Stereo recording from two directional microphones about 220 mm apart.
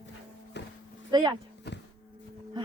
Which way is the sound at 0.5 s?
50° left (ahead or behind).